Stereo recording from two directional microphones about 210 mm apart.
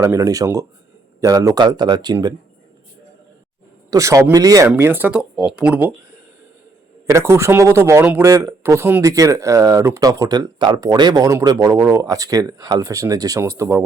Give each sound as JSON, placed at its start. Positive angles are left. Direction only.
{"t": 0.0, "sound": "speech", "side_deg": -15}
{"t": 3.8, "sound": "speech", "side_deg": -15}
{"t": 7.1, "sound": "speech", "side_deg": -15}